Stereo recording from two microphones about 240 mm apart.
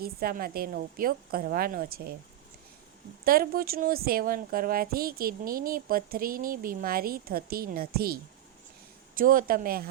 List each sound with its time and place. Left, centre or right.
0.0 s speech: right
3.2 s speech: right